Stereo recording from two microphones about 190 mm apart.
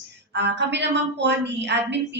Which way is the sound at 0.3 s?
65° right (ahead or behind).